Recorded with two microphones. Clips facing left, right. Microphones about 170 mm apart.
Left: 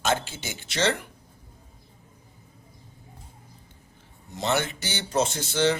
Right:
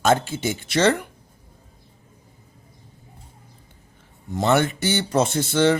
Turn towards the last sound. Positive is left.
turn(degrees=-55)  # may be behind; listen again after turning